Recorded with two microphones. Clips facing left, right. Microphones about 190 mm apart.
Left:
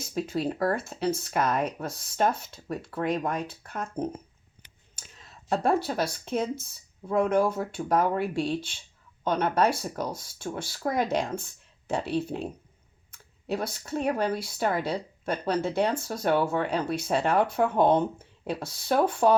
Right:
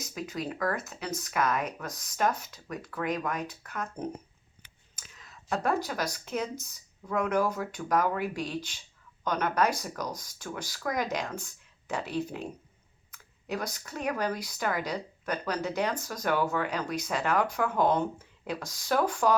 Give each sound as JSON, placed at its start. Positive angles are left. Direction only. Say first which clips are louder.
{"t": 0.0, "sound": "speech", "louder": "left 6 dB", "side_deg": 30}
{"t": 4.9, "sound": "a sound", "louder": "left 2 dB", "side_deg": 30}
{"t": 6.1, "sound": "speech", "louder": "left 4 dB", "side_deg": 30}